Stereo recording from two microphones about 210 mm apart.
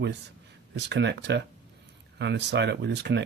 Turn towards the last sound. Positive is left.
turn(degrees=-55)  # may be behind; listen again after turning